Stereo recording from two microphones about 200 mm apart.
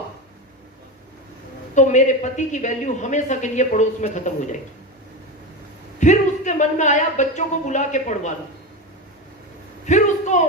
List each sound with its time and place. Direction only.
1.7 s speech: 35° left (ahead or behind)
6.0 s speech: 35° left (ahead or behind)
9.8 s a sound: 35° left (ahead or behind)